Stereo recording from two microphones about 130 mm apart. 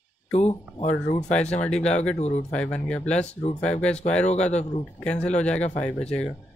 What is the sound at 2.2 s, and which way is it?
Speech, 55° left (ahead or behind).